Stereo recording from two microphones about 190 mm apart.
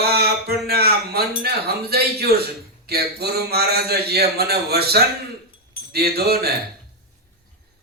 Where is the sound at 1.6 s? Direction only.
55° right (ahead or behind).